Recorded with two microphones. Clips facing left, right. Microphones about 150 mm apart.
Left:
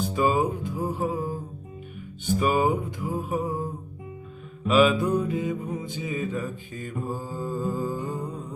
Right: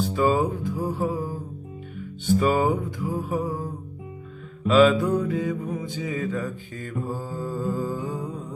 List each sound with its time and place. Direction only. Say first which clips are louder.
0.1 s music: even; 15° left (ahead or behind)
2.2 s music: right 2 dB; 15° left (ahead or behind)
4.6 s mantra: right 3 dB; 15° left (ahead or behind)